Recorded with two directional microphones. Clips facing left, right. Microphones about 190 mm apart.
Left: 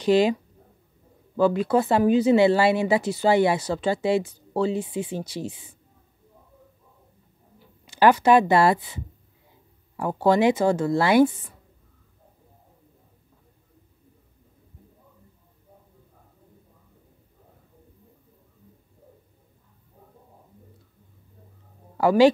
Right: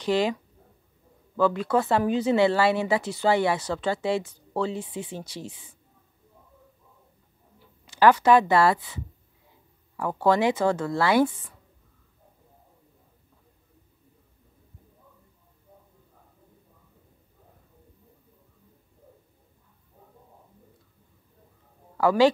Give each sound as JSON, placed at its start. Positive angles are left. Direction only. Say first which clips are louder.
{"t": 0.0, "sound": "speech", "louder": "left 5 dB", "side_deg": 15}
{"t": 7.8, "sound": "speech", "louder": "left 1 dB", "side_deg": 15}
{"t": 21.9, "sound": "speech", "louder": "left 3 dB", "side_deg": 15}